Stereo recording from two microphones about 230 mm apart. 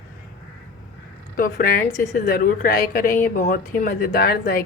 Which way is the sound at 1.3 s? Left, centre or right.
Left.